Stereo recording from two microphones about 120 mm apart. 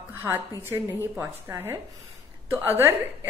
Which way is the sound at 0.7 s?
20° right (ahead or behind).